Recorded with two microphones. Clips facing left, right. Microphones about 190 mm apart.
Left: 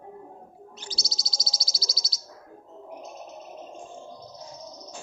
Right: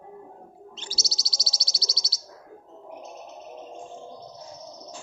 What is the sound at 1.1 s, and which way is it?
Bird, 90° left.